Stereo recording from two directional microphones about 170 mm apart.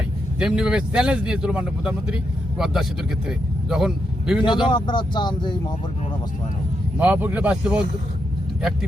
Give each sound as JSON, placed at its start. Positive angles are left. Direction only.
{"t": 0.3, "sound": "speech", "side_deg": -5}
{"t": 4.4, "sound": "speech", "side_deg": 25}
{"t": 7.0, "sound": "speech", "side_deg": -10}